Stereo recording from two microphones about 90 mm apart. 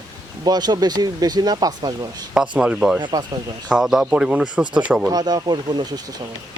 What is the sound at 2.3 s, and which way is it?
Speech, 10° right (ahead or behind).